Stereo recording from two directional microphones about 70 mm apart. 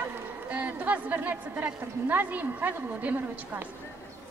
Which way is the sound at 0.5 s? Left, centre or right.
Right.